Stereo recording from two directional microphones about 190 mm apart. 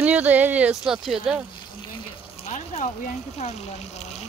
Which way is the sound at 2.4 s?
35° left (ahead or behind).